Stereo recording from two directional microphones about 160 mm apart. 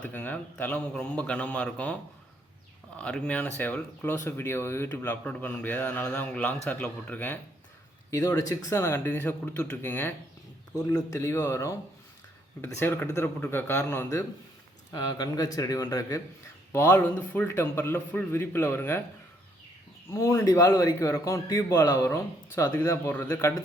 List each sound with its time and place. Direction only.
0.0 s a man's voice: 10° left (ahead or behind)
8.1 s a man's voice: 20° left (ahead or behind)
20.1 s a man's voice: 20° left (ahead or behind)